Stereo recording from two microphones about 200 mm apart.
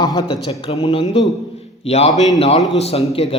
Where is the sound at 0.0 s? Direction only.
20° left (ahead or behind).